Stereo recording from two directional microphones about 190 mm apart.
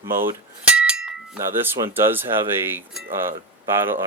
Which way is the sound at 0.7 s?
5° right (ahead or behind).